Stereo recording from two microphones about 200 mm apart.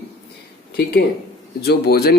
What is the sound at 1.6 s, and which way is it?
Speech, 50° left (ahead or behind).